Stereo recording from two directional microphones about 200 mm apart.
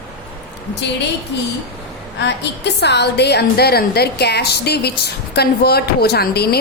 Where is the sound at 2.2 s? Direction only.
60° left (ahead or behind).